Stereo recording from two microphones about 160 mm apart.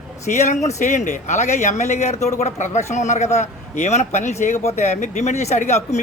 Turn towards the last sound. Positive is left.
turn(degrees=45)  # may be behind; listen again after turning